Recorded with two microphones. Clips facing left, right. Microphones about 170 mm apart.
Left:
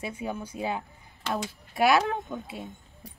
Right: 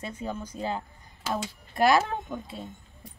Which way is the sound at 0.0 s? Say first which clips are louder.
Left 1 dB; 10° left (ahead or behind).